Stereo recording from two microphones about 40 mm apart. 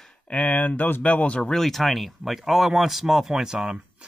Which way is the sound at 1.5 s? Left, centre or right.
Centre.